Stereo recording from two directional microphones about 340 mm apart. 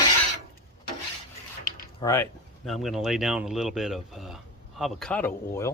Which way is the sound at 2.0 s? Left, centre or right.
Centre.